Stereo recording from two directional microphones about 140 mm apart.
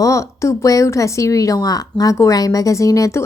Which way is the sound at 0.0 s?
20° left (ahead or behind).